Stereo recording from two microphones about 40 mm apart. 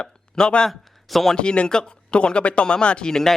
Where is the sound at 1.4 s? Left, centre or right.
Left.